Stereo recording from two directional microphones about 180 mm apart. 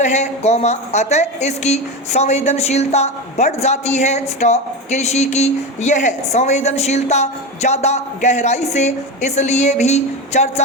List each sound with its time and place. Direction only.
0.0 s a woman's voice: 40° left (ahead or behind)